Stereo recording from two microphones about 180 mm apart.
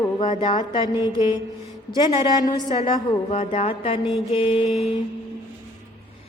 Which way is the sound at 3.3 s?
35° left (ahead or behind).